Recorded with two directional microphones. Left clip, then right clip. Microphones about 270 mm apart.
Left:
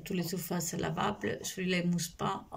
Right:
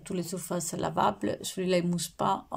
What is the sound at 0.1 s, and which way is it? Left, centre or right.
Speech, centre.